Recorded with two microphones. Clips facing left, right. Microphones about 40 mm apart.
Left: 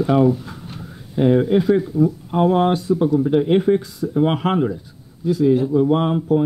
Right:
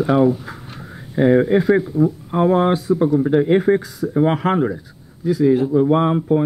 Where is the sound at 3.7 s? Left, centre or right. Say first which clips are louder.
Right 1 dB; right.